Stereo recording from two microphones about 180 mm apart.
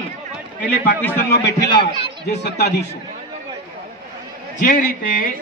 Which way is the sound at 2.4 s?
70° left (ahead or behind).